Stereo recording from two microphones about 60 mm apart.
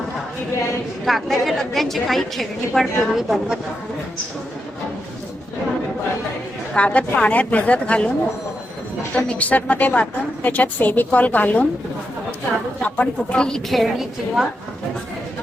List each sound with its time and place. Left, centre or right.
1.0 s a woman's voice: centre
6.7 s a woman's voice: left
9.1 s a woman's voice: left
12.8 s speech: centre
13.7 s a woman's voice: centre